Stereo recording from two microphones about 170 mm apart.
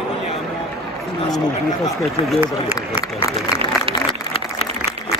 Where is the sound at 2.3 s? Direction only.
10° right (ahead or behind).